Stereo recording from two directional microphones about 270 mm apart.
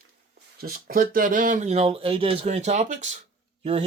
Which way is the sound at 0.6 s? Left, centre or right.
Right.